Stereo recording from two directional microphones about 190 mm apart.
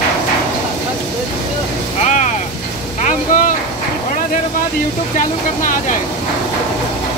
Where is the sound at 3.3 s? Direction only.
45° left (ahead or behind).